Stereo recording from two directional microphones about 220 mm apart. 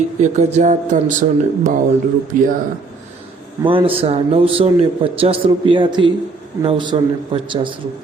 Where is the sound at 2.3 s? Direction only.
40° right (ahead or behind).